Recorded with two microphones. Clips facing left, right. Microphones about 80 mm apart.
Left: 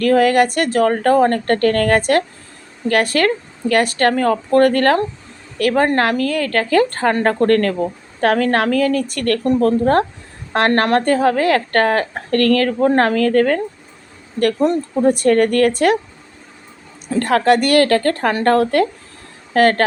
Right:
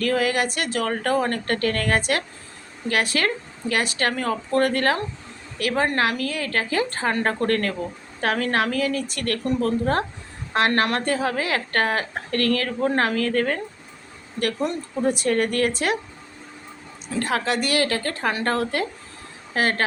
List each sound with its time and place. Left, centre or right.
0.0 s a woman's voice: left
17.1 s a woman's voice: left